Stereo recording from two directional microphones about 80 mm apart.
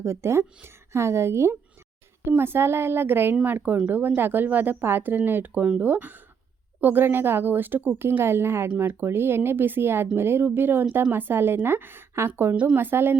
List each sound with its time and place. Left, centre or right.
0.0 s a woman's voice: right